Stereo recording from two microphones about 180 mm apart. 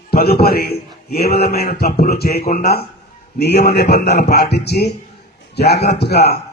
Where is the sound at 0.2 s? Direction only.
60° left (ahead or behind).